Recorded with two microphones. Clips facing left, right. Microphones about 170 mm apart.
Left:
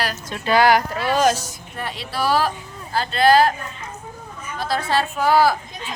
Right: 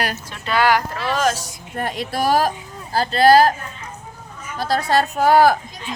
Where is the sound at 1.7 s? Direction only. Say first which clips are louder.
Right 5 dB; 50° right (ahead or behind).